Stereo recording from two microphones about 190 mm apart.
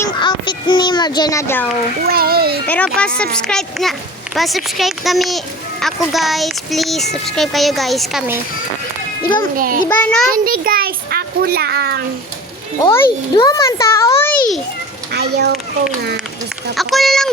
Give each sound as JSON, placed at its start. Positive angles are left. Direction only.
{"t": 0.0, "sound": "a sound", "side_deg": 25}
{"t": 2.0, "sound": "a child's voice", "side_deg": -55}
{"t": 2.6, "sound": "a child's voice", "side_deg": 5}
{"t": 9.6, "sound": "a child's voice", "side_deg": -45}
{"t": 9.9, "sound": "a child's voice", "side_deg": 5}
{"t": 10.3, "sound": "a child's voice", "side_deg": -50}
{"t": 12.8, "sound": "a child's voice", "side_deg": 15}
{"t": 15.1, "sound": "a child's voice", "side_deg": -60}
{"t": 16.7, "sound": "a child's voice", "side_deg": 0}